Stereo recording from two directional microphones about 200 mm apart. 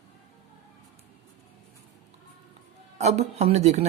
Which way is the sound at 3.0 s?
35° right (ahead or behind).